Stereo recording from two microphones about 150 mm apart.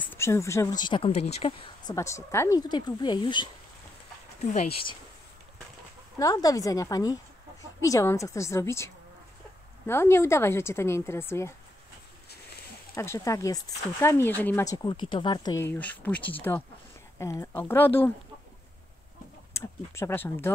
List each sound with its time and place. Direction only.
0.0 s speech: 15° left (ahead or behind)
0.8 s speech: 35° left (ahead or behind)
1.1 s speech: 45° left (ahead or behind)
1.9 s speech: 20° left (ahead or behind)
4.4 s speech: 50° left (ahead or behind)
6.1 s speech: 25° left (ahead or behind)
12.9 s speech: 20° left (ahead or behind)
14.7 s speech: 25° left (ahead or behind)
15.6 s speech: 10° left (ahead or behind)
19.5 s speech: 20° left (ahead or behind)